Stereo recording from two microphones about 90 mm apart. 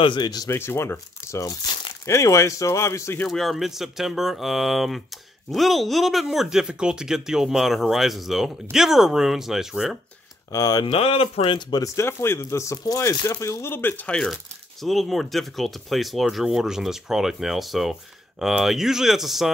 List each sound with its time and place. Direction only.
0.0 s speech: 55° left (ahead or behind)
0.5 s speech: 30° left (ahead or behind)
3.3 s speech: centre (ahead or behind)
10.5 s speech: 45° left (ahead or behind)
10.9 s speech: 90° left; by 11.8 s 60° left (ahead or behind)
11.8 s speech: 35° left (ahead or behind)
13.3 s speech: 30° left (ahead or behind); by 14.2 s 15° left (ahead or behind)
14.2 s speech: centre (ahead or behind)